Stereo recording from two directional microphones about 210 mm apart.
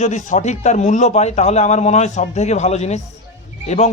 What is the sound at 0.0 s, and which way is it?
A man's voice, 35° left (ahead or behind).